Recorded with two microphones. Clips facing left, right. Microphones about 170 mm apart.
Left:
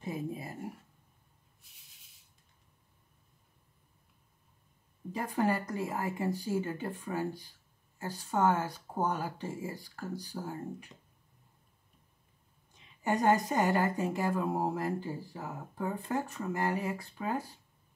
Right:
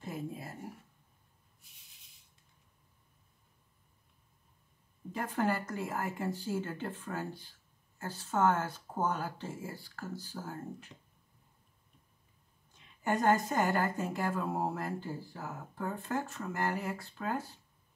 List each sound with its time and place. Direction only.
0.0 s speech: 15° left (ahead or behind)
5.1 s speech: 10° left (ahead or behind)
13.1 s speech: 10° left (ahead or behind)